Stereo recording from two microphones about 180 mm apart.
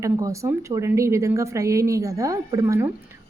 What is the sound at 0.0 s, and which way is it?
A woman's voice, 15° right (ahead or behind).